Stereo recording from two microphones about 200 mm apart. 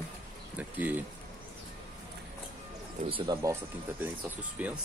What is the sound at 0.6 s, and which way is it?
Speech, 10° right (ahead or behind).